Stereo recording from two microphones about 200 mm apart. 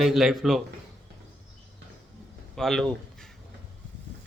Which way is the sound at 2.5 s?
Centre (ahead or behind).